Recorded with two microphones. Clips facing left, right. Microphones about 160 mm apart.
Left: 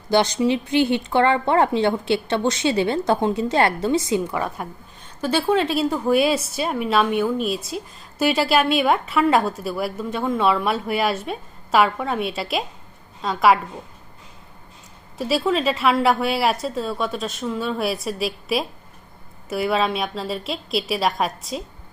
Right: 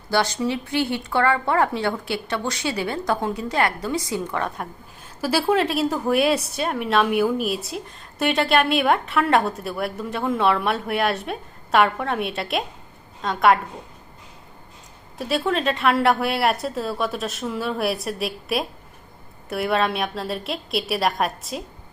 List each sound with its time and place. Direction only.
0.1 s speech: 20° left (ahead or behind)
4.3 s a woman's voice: 5° left (ahead or behind)
15.2 s a woman's voice: centre (ahead or behind)